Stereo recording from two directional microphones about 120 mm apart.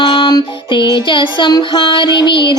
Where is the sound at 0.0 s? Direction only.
40° left (ahead or behind).